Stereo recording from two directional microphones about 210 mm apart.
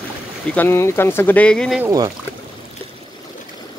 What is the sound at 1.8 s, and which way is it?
Speech, 15° right (ahead or behind).